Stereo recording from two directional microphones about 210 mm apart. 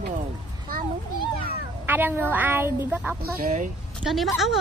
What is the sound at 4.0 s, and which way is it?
Speech, centre (ahead or behind).